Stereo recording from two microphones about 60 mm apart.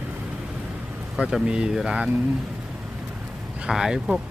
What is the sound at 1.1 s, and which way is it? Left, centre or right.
Speech, centre.